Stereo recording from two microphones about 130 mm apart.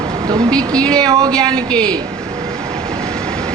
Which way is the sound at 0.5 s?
5° left (ahead or behind).